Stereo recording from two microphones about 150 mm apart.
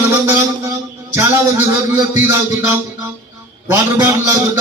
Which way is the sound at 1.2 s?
15° right (ahead or behind).